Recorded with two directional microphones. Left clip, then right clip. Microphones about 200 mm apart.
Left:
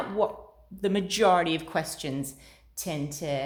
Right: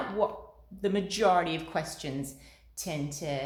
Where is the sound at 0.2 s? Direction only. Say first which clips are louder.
Left 3 dB; 40° left (ahead or behind).